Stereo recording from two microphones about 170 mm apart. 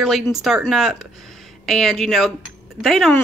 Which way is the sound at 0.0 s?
Centre (ahead or behind).